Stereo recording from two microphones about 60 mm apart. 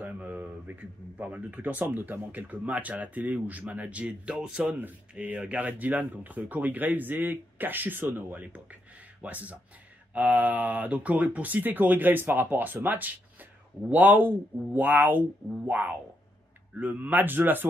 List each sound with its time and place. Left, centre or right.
0.0 s a man's voice: right
5.2 s a man's voice: right